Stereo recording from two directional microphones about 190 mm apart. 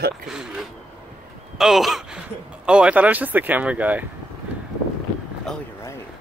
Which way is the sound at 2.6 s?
5° right (ahead or behind).